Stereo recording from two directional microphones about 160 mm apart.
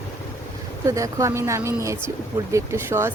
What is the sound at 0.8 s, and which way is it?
Speech, 20° right (ahead or behind).